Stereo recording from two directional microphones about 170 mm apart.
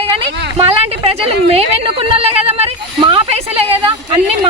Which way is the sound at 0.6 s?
35° right (ahead or behind).